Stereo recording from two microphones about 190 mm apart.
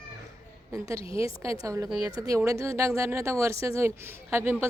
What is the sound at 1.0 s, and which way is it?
Speech, 30° left (ahead or behind).